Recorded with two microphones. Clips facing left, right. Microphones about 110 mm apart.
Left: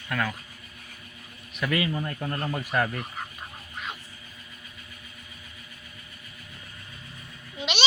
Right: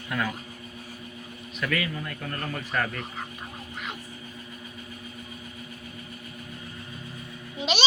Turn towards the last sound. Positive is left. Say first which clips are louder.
# right 3 dB
turn(degrees=-40)  # may be behind; listen again after turning